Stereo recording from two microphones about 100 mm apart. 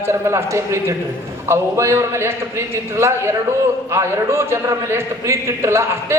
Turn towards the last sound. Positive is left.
turn(degrees=-25)  # may be behind; listen again after turning